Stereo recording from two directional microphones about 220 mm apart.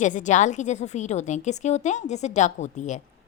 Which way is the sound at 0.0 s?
35° left (ahead or behind).